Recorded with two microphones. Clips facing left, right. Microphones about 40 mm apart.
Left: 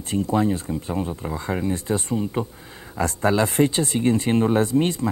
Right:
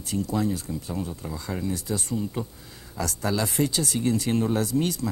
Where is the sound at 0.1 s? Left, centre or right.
Left.